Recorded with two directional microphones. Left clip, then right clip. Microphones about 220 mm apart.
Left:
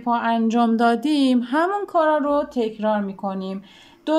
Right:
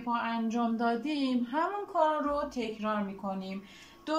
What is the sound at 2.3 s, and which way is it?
Speech, 40° left (ahead or behind).